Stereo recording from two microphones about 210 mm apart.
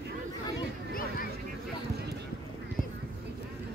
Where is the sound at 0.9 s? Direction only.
45° left (ahead or behind).